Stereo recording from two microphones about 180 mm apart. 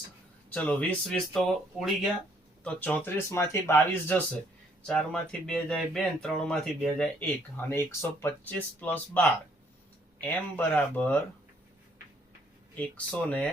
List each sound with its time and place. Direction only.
0.5 s speech: 5° left (ahead or behind)
12.7 s speech: 10° left (ahead or behind)